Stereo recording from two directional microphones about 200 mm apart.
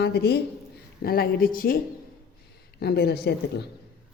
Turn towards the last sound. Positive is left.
turn(degrees=55)  # may be behind; listen again after turning